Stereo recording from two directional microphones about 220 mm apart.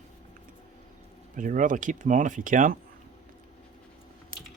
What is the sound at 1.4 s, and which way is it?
Speech, 35° right (ahead or behind).